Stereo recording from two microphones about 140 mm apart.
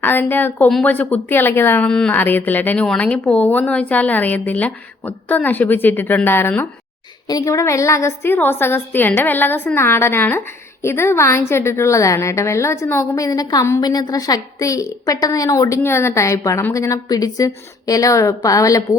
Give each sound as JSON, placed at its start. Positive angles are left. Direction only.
{"t": 0.0, "sound": "a woman's voice", "side_deg": 15}